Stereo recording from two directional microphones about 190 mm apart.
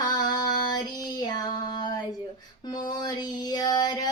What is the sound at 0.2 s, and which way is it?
Female singing, 20° left (ahead or behind).